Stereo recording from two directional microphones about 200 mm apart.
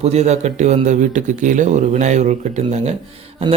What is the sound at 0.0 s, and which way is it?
A man's voice, 35° right (ahead or behind).